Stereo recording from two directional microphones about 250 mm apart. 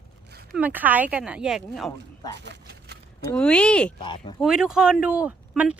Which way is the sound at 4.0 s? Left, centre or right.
Centre.